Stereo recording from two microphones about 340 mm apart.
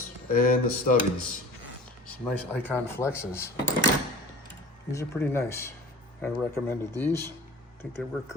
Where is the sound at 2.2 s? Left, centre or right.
Centre.